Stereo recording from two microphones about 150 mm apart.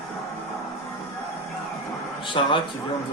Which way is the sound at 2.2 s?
35° left (ahead or behind).